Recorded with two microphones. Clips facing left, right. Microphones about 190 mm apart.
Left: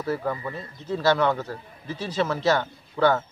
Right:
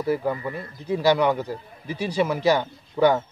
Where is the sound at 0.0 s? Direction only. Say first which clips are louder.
Right 3 dB; 15° right (ahead or behind).